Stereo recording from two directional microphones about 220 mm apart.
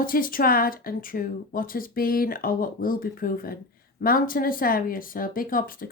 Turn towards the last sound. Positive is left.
turn(degrees=40)  # may be behind; listen again after turning